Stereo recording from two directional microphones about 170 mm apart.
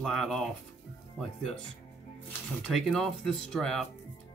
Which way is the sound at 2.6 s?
Centre (ahead or behind).